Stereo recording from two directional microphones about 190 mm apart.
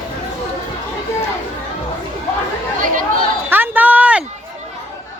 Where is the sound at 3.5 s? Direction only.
10° right (ahead or behind).